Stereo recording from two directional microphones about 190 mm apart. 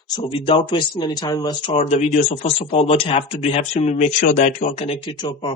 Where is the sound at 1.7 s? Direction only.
35° left (ahead or behind).